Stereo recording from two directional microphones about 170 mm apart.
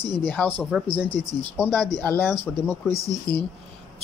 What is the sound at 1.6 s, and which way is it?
Speech, 10° left (ahead or behind).